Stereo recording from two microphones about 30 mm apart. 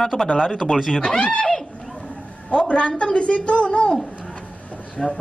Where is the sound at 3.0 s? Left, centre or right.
Left.